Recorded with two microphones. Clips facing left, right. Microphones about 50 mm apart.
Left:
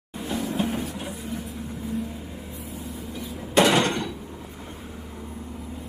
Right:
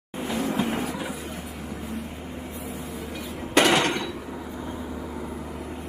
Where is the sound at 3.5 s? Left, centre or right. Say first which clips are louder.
Left 1 dB; right.